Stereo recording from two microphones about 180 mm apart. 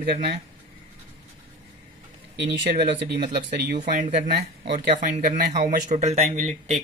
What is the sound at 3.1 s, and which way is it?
Speech, 30° right (ahead or behind).